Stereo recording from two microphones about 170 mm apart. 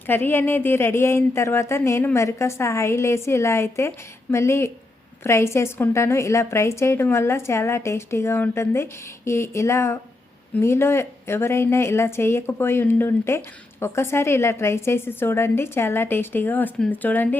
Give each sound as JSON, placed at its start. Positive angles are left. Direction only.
{"t": 0.1, "sound": "a woman's voice", "side_deg": 15}